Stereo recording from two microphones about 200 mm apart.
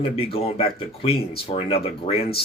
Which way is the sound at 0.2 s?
30° left (ahead or behind).